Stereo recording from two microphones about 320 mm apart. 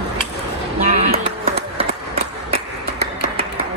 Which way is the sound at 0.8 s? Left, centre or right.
Right.